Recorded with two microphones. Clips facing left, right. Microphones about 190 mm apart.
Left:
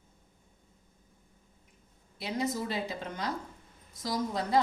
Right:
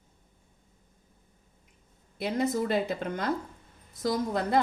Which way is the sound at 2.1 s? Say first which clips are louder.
Right 5 dB; 55° right (ahead or behind).